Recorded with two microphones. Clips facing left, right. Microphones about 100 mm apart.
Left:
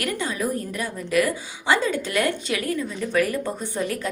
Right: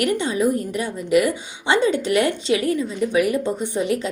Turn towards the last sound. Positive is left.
turn(degrees=-20)  # may be behind; listen again after turning